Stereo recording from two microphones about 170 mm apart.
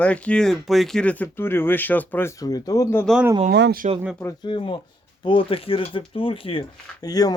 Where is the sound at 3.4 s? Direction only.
75° right (ahead or behind).